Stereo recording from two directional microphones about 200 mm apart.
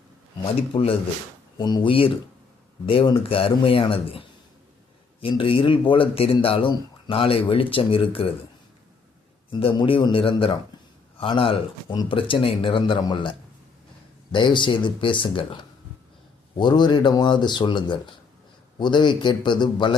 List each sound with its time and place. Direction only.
0.7 s speech: 30° left (ahead or behind)
9.5 s speech: 25° left (ahead or behind)
14.3 s speech: 25° left (ahead or behind)